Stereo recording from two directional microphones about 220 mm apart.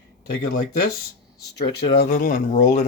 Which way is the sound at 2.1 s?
40° left (ahead or behind).